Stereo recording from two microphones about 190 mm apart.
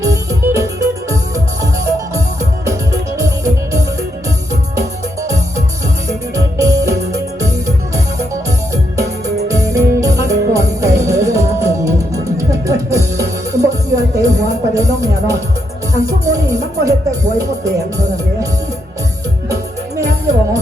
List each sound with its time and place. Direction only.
0.0 s music: 15° right (ahead or behind)
6.1 s music: 15° right (ahead or behind)
8.7 s music: 15° right (ahead or behind)
20.0 s music: 15° right (ahead or behind)